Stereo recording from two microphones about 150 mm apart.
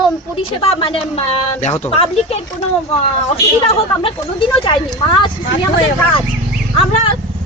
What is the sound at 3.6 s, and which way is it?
Speech, 40° left (ahead or behind).